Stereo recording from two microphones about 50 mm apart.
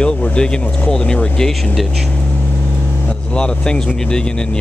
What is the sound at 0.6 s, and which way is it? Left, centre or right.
Speech, left.